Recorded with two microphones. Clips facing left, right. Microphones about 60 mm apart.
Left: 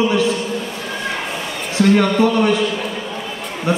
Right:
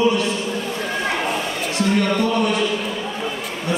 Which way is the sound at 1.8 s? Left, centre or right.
Left.